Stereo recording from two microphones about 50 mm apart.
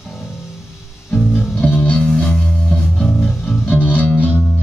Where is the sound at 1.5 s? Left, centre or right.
Left; by 3.6 s centre.